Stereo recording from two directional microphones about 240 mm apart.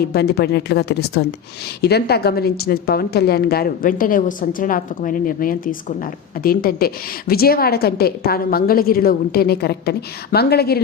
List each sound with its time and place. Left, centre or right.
0.1 s a woman's voice: left